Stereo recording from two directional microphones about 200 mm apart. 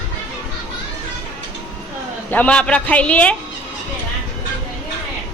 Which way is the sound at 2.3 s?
5° left (ahead or behind).